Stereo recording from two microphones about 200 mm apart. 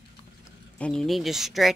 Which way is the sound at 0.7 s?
5° left (ahead or behind).